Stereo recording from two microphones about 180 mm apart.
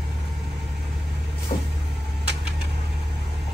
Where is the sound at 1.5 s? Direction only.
40° left (ahead or behind).